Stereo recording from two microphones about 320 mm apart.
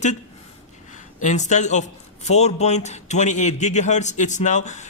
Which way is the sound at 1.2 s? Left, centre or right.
Left.